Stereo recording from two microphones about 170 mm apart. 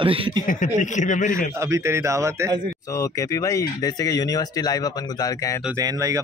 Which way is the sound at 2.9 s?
20° left (ahead or behind).